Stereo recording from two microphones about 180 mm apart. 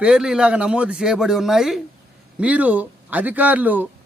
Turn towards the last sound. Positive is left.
turn(degrees=-10)  # may be behind; listen again after turning